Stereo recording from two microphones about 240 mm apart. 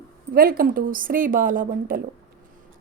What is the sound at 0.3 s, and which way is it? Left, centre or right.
Speech, right.